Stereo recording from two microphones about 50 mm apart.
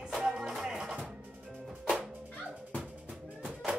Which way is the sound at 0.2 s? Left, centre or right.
Centre.